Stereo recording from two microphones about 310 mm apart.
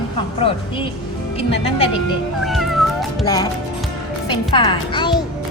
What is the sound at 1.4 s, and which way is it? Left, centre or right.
Speech, centre.